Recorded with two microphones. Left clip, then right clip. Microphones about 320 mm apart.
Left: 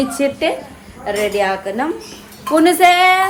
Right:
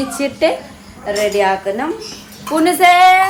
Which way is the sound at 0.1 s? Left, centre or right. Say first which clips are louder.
Right 1 dB; centre.